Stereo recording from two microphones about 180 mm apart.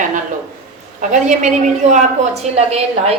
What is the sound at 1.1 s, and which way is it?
A woman's voice, 45° right (ahead or behind).